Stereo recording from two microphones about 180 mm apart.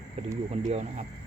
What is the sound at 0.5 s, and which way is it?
Speech, 35° right (ahead or behind).